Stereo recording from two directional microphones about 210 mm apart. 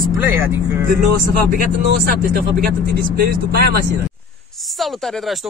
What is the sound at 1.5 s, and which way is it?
Speech, 45° right (ahead or behind).